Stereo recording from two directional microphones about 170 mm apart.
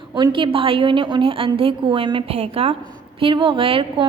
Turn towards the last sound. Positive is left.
turn(degrees=-30)  # may be behind; listen again after turning